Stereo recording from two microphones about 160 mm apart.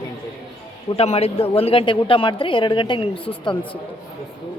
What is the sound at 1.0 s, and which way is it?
A woman's voice, 40° left (ahead or behind).